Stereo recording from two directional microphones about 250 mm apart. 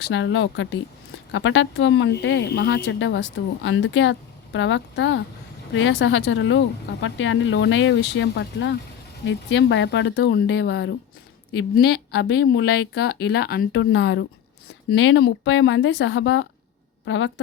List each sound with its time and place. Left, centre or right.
0.0 s speech: left